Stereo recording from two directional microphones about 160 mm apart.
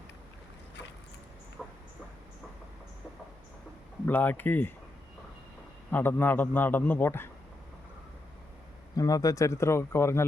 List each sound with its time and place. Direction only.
1.6 s dog: centre (ahead or behind)
4.0 s a man's voice: 10° left (ahead or behind)
5.9 s a man's voice: 15° left (ahead or behind)
9.0 s a man's voice: 25° left (ahead or behind)